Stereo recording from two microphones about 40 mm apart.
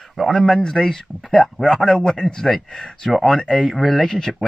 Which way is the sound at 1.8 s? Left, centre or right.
Left.